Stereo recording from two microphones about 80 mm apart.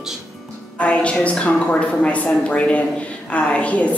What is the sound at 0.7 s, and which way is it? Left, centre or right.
A woman's voice, centre.